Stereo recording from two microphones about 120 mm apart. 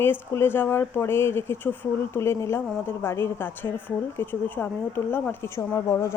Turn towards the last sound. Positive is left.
turn(degrees=25)  # may be behind; listen again after turning